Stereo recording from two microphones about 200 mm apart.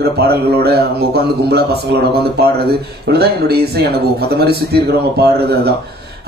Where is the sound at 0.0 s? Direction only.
55° right (ahead or behind).